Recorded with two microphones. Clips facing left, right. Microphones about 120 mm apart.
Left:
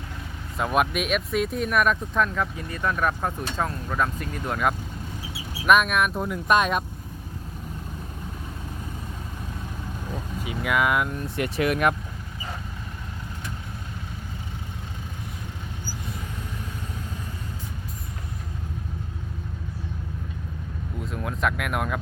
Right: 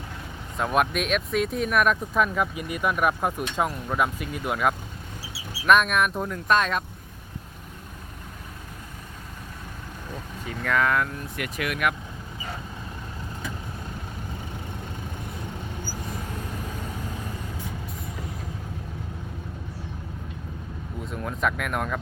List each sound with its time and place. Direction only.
0.5 s speech: centre (ahead or behind)
10.4 s speech: 10° left (ahead or behind)
11.3 s speech: 30° left (ahead or behind)
21.0 s a sound: centre (ahead or behind)